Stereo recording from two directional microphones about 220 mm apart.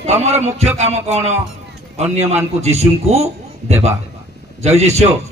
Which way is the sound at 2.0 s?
30° right (ahead or behind).